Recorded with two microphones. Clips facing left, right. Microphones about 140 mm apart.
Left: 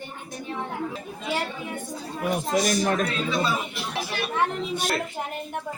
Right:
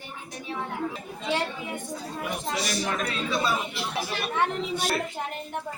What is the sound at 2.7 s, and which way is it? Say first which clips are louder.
Speech: left 6 dB; 45° left (ahead or behind).